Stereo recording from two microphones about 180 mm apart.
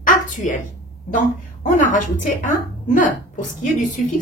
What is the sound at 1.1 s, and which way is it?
A woman's voice, 45° left (ahead or behind).